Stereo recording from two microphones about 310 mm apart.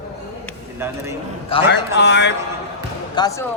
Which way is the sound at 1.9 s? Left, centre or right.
Left.